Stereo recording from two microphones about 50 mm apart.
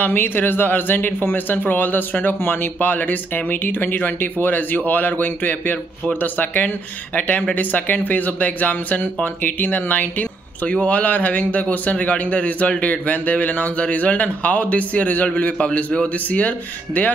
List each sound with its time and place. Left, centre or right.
0.0 s a man's voice: left
15.5 s a man's voice: left